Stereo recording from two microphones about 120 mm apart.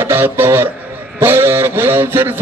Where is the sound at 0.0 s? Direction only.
20° right (ahead or behind).